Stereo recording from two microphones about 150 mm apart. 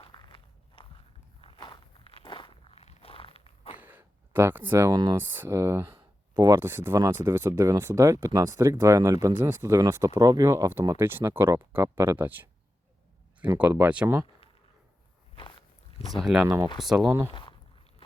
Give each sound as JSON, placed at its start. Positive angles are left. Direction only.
{"t": 0.0, "sound": "walk", "side_deg": 30}
{"t": 3.8, "sound": "a sound", "side_deg": -10}
{"t": 5.1, "sound": "speech", "side_deg": -15}
{"t": 13.6, "sound": "speech", "side_deg": -10}
{"t": 16.1, "sound": "speech", "side_deg": -5}
{"t": 17.1, "sound": "speech", "side_deg": -20}